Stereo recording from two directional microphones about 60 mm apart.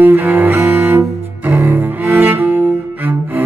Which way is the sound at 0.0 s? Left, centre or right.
Right.